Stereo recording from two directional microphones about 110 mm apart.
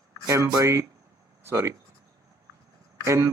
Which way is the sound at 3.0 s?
25° right (ahead or behind).